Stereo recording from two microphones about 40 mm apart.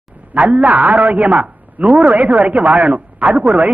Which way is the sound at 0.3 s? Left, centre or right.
Right.